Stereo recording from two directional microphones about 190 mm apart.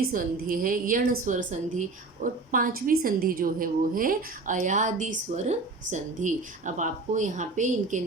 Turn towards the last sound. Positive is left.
turn(degrees=-40)  # may be behind; listen again after turning